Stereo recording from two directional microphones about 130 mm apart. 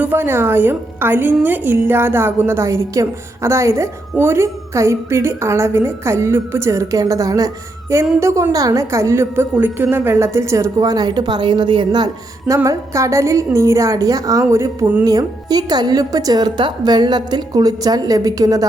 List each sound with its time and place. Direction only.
0.0 s a woman's voice: 15° right (ahead or behind)
15.0 s a woman's voice: 30° right (ahead or behind)